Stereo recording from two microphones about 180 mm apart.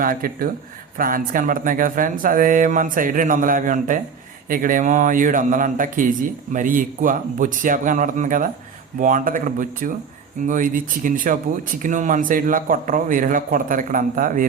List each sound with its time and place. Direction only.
0.0 s speech: 50° right (ahead or behind)